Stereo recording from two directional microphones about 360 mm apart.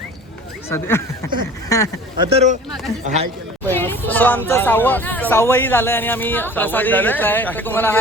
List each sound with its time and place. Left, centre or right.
0.7 s speech: centre
2.2 s speech: centre
3.7 s speech: centre